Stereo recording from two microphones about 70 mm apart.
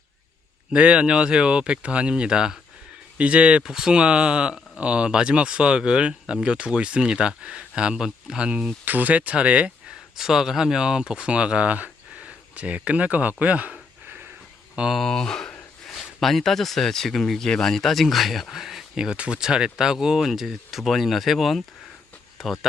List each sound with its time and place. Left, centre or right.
0.7 s speech: centre
8.8 s speech: right
10.2 s speech: centre
14.9 s speech: centre